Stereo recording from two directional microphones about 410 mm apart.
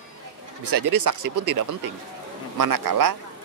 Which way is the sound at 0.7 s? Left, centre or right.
Right.